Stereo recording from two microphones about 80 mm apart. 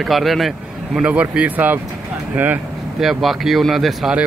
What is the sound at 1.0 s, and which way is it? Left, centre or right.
A man's voice, centre.